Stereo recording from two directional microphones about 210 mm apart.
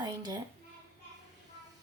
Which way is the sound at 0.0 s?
20° right (ahead or behind).